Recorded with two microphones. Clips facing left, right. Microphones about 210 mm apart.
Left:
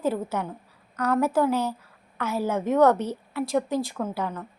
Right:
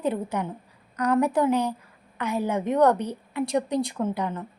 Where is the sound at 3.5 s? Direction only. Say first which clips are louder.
Left 1 dB; 5° left (ahead or behind).